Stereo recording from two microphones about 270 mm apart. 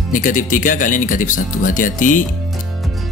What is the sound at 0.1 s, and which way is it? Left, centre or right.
Speech, left.